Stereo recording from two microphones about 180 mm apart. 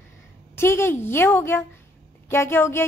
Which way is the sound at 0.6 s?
15° left (ahead or behind).